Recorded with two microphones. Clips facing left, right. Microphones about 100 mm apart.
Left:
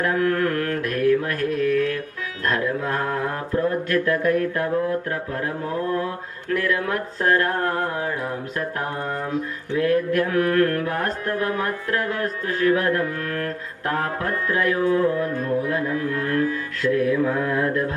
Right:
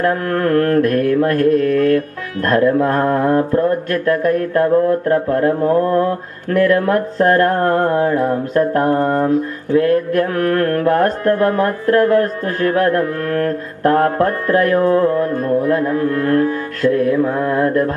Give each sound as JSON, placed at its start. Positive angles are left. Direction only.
{"t": 0.0, "sound": "speech", "side_deg": -45}